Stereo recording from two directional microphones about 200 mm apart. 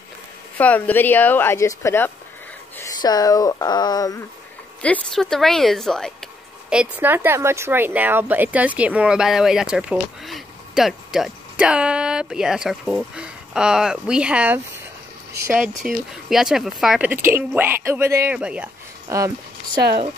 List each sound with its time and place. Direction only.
0.6 s a woman's voice: 10° left (ahead or behind)
4.8 s speech: 5° left (ahead or behind); by 19.8 s 15° right (ahead or behind)